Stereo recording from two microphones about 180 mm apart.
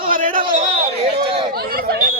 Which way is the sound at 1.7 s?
60° right (ahead or behind).